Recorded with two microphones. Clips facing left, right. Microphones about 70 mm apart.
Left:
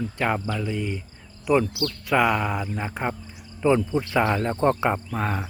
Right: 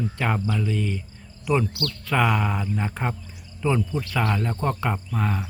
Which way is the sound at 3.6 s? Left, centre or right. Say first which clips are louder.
Left 4 dB; centre.